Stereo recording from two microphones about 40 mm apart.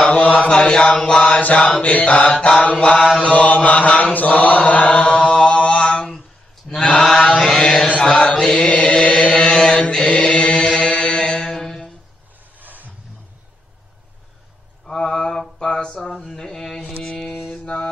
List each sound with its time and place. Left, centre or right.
0.1 s mantra: left
0.5 s mantra: left
7.1 s chant: centre
7.5 s mantra: centre
8.0 s chant: left
10.8 s music: left; by 11.9 s centre
12.5 s a sound: right
14.9 s a sound: centre
15.6 s mantra: centre
16.3 s a sound: centre
17.0 s mantra: centre